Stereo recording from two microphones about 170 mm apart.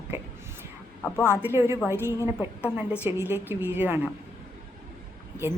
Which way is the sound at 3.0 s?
15° right (ahead or behind).